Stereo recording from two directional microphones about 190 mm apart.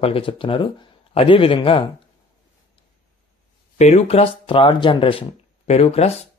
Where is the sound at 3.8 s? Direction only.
35° left (ahead or behind).